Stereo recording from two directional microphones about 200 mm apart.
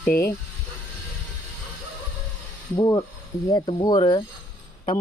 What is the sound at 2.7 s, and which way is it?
Speech, 20° left (ahead or behind).